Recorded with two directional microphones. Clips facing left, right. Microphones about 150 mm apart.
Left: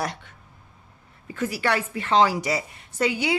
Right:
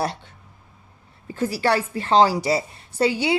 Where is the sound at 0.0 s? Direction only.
30° right (ahead or behind).